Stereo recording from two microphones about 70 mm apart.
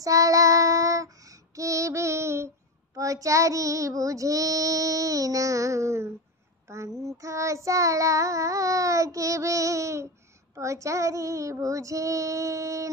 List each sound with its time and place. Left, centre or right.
0.0 s child singing: right